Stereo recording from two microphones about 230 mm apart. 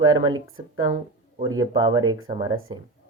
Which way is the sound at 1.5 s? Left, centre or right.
Centre.